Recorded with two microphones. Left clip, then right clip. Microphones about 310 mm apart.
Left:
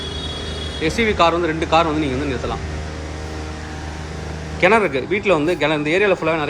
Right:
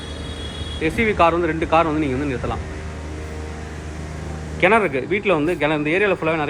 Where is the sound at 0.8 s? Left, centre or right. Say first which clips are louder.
Left 1 dB; centre.